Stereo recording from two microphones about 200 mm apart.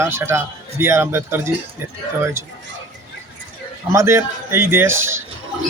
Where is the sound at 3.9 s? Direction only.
15° right (ahead or behind).